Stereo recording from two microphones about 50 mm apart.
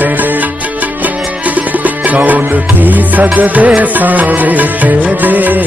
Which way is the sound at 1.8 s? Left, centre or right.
Right.